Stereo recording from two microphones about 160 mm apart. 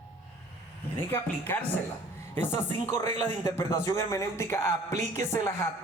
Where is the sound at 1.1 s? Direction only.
10° left (ahead or behind).